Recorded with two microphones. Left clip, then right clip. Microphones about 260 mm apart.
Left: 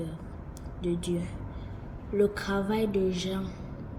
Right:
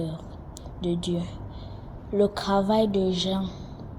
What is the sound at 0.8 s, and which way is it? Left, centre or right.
Speech, right.